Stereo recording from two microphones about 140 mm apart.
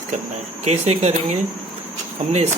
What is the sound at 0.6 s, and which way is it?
Speech, 50° right (ahead or behind).